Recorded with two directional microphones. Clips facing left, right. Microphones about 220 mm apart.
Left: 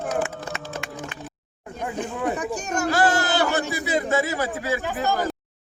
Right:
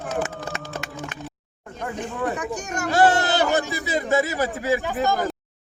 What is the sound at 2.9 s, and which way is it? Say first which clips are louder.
Speech: right 4 dB; 20° right (ahead or behind).